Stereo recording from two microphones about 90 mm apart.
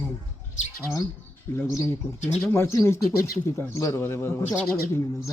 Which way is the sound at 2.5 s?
30° left (ahead or behind).